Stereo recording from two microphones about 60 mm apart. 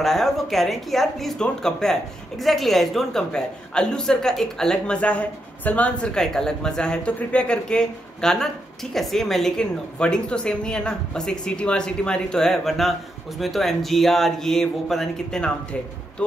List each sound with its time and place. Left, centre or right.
0.0 s speech: centre
16.2 s speech: centre